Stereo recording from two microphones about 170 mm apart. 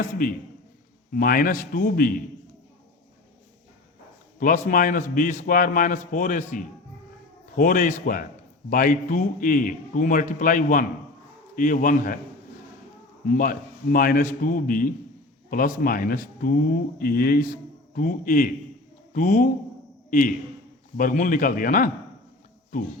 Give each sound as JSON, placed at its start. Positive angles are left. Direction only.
{"t": 0.0, "sound": "speech", "side_deg": 55}
{"t": 4.4, "sound": "a man's voice", "side_deg": 50}
{"t": 13.2, "sound": "a man's voice", "side_deg": 55}